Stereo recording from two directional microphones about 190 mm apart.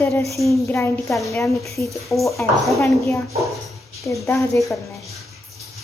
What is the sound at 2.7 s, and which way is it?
A woman's voice, 15° left (ahead or behind).